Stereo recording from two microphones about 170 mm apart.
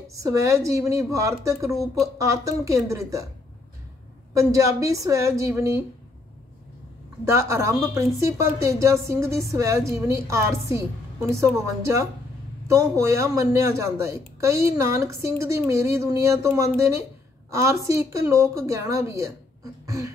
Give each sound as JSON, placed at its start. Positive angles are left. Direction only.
{"t": 0.1, "sound": "a woman's voice", "side_deg": -20}
{"t": 4.3, "sound": "a woman's voice", "side_deg": -20}
{"t": 7.2, "sound": "a woman's voice", "side_deg": -15}